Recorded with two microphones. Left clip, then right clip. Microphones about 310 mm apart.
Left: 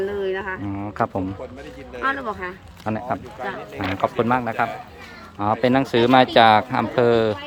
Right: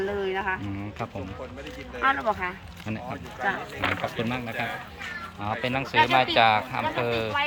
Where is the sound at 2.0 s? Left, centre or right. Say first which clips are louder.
Even; centre.